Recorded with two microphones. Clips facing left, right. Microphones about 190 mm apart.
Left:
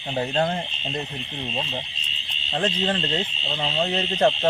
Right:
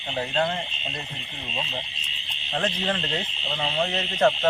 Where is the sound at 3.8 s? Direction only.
25° left (ahead or behind).